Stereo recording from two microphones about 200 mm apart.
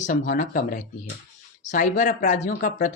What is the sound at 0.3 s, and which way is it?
Speech, 45° left (ahead or behind).